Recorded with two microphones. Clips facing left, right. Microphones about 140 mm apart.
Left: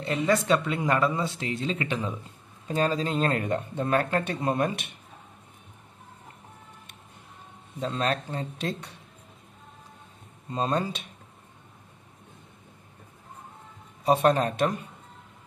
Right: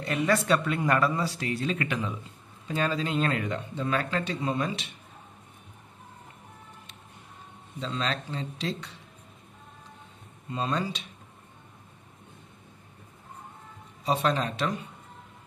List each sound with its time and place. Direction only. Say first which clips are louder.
0.0 s speech: left 1 dB; 25° left (ahead or behind); by 4.9 s 60° left (ahead or behind)
7.8 s speech: left 4 dB; 50° left (ahead or behind)
10.5 s speech: left 3 dB; 45° left (ahead or behind)
14.0 s speech: left 5 dB; 50° left (ahead or behind)